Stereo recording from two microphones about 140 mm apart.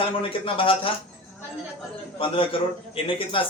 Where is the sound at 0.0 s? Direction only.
40° left (ahead or behind).